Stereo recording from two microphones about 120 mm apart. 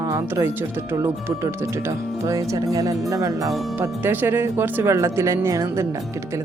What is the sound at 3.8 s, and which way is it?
A woman's voice, 15° right (ahead or behind).